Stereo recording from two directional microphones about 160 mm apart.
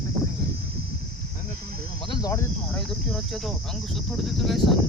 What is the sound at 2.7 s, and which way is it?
Speech, centre (ahead or behind).